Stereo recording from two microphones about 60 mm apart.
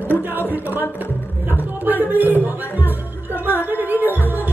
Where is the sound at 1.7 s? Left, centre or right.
Right.